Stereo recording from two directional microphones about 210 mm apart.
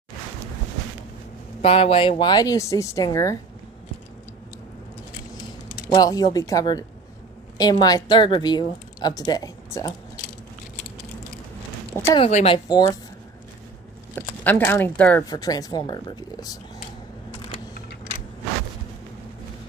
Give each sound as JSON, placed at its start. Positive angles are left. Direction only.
{"t": 1.6, "sound": "a woman's voice", "side_deg": 25}
{"t": 5.9, "sound": "a woman's voice", "side_deg": 20}
{"t": 12.2, "sound": "a woman's voice", "side_deg": 30}
{"t": 14.1, "sound": "speech", "side_deg": 10}